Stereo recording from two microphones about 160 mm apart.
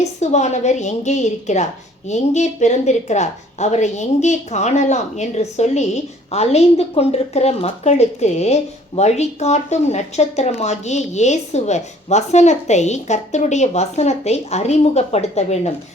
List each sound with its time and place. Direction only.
0.2 s a woman's voice: 45° left (ahead or behind)